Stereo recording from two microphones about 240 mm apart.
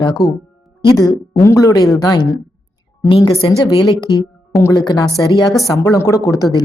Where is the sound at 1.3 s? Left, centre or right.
Centre.